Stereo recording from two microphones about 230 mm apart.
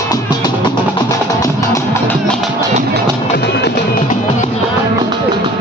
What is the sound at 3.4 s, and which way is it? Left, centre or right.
Music, left.